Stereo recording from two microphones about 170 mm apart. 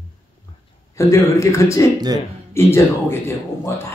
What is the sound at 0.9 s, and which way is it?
Speech, 20° left (ahead or behind).